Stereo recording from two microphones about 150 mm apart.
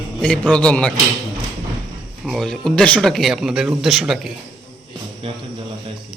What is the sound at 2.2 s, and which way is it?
A man's voice, centre (ahead or behind).